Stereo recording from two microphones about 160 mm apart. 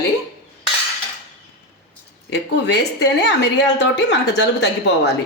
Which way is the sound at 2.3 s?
90° left.